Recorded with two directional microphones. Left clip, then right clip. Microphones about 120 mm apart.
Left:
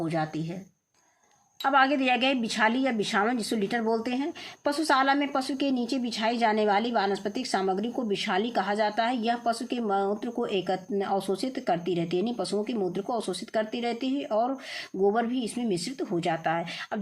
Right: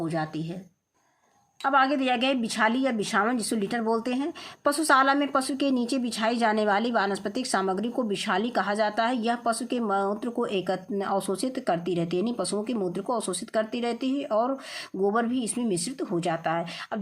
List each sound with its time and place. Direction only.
0.0 s speech: 10° right (ahead or behind)
1.6 s speech: 20° right (ahead or behind)